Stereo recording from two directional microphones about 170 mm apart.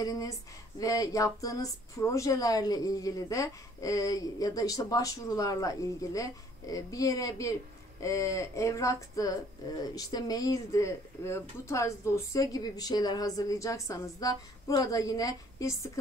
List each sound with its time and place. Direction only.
0.0 s speech: 20° left (ahead or behind)